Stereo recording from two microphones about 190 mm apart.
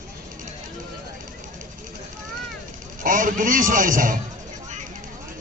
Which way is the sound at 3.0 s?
45° right (ahead or behind).